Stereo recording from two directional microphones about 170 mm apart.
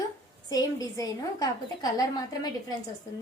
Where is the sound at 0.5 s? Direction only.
20° left (ahead or behind).